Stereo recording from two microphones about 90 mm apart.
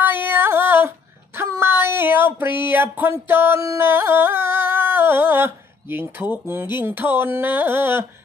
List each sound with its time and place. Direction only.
0.0 s female singing: 25° right (ahead or behind)
3.6 s music: 30° right (ahead or behind)
6.3 s speech: 25° right (ahead or behind)